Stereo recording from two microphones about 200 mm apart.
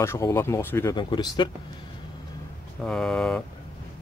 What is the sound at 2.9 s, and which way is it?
Speech, 5° left (ahead or behind).